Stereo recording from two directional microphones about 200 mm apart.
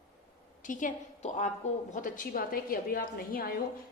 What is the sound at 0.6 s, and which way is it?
A woman's voice, 40° left (ahead or behind).